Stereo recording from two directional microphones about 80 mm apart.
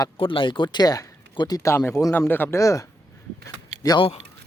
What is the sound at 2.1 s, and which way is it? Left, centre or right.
Speech, left.